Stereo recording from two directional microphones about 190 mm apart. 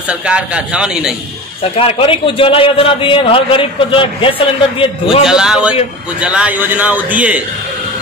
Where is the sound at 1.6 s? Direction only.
30° left (ahead or behind).